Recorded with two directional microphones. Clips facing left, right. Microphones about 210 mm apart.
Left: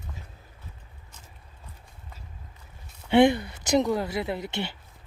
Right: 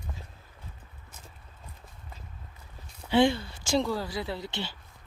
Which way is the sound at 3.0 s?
20° left (ahead or behind).